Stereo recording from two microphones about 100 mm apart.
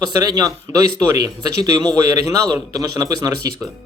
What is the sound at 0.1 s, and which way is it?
Speech, 40° right (ahead or behind).